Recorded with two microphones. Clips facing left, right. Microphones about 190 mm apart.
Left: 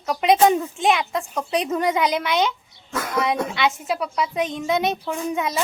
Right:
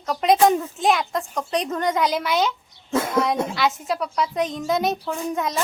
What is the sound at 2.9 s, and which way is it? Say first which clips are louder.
Speech: right 6 dB; 25° right (ahead or behind).